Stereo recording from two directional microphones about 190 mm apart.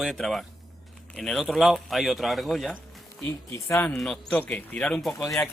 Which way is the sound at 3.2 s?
15° left (ahead or behind).